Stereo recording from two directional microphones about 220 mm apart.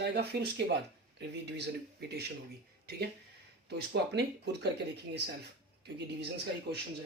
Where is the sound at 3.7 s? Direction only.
50° right (ahead or behind).